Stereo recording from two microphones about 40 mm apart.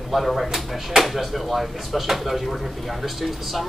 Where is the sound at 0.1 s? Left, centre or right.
Centre.